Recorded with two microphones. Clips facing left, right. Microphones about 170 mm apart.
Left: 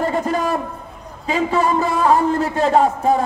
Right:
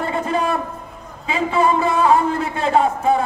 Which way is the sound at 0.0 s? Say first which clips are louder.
Left 1 dB; 40° left (ahead or behind).